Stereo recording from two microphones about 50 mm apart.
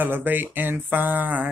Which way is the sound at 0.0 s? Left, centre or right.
Right.